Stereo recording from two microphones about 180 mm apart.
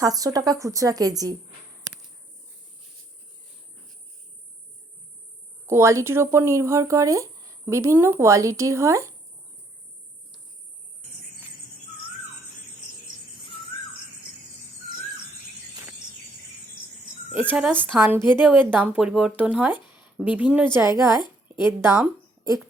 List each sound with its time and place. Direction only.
0.0 s a woman's voice: 20° right (ahead or behind)
5.6 s speech: 15° right (ahead or behind)
17.5 s a woman's voice: 5° right (ahead or behind)